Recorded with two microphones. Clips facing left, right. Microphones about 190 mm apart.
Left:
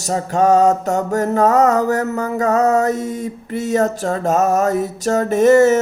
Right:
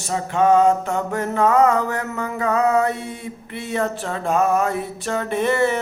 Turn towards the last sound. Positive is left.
turn(degrees=40)  # may be behind; listen again after turning